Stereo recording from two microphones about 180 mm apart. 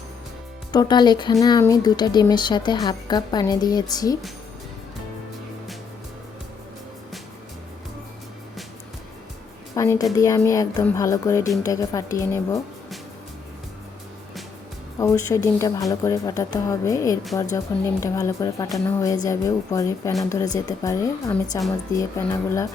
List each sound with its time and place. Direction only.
0.7 s speech: 25° left (ahead or behind)
9.7 s speech: 15° left (ahead or behind)
14.9 s speech: 20° left (ahead or behind)